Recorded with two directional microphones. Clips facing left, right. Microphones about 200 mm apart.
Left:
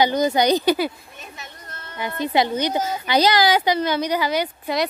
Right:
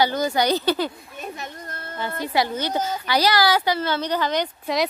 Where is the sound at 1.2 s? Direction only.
50° right (ahead or behind).